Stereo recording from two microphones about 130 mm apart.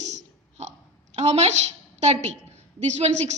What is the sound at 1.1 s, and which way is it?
A woman's voice, 60° right (ahead or behind).